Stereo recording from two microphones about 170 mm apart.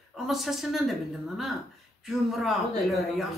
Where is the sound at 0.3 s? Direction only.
Centre (ahead or behind).